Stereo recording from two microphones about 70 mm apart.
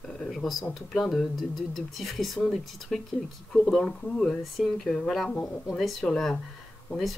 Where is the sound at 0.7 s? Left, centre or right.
Centre.